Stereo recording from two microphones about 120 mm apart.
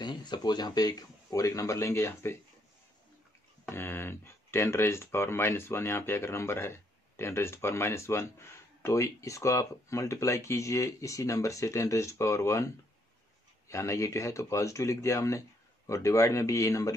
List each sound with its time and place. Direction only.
0.0 s speech: 35° left (ahead or behind)
3.6 s speech: 20° left (ahead or behind)